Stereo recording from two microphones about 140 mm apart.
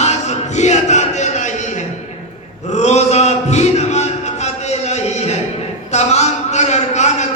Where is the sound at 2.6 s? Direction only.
55° left (ahead or behind).